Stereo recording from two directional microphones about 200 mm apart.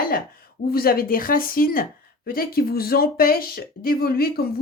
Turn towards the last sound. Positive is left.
turn(degrees=50)  # may be behind; listen again after turning